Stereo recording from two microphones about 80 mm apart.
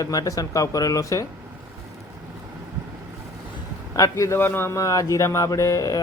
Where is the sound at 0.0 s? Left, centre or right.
Left.